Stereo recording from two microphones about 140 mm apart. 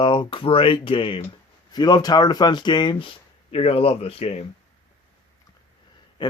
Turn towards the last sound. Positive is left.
turn(degrees=45)  # may be behind; listen again after turning